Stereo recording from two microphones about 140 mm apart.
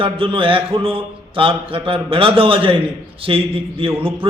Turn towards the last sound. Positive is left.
turn(degrees=-40)  # may be behind; listen again after turning